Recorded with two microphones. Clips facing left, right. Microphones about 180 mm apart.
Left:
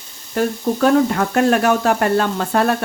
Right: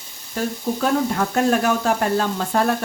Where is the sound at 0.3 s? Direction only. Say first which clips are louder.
Left 5 dB; 70° left (ahead or behind).